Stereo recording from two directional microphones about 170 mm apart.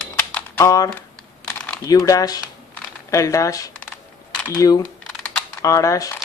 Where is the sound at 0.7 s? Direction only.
20° left (ahead or behind).